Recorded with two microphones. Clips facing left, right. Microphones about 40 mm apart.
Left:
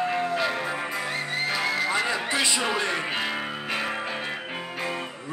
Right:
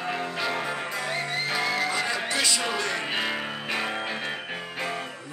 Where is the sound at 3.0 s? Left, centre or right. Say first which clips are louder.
Even; centre.